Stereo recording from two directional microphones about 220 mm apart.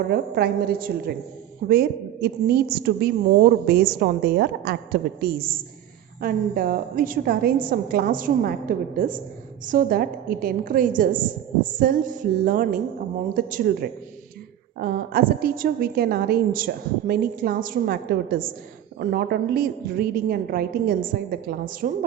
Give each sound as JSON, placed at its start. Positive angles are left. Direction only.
{"t": 0.1, "sound": "a woman's voice", "side_deg": -45}